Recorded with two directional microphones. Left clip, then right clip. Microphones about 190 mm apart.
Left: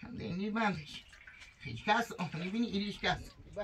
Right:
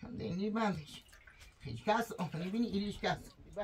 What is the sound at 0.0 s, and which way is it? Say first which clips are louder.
Speech: right 1 dB; 75° right (ahead or behind).